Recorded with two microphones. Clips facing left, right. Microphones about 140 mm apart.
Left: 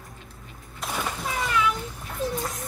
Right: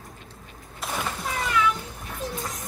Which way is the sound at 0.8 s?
Centre (ahead or behind).